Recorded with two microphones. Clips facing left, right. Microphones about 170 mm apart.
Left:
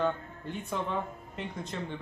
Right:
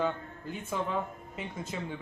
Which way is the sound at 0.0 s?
5° right (ahead or behind).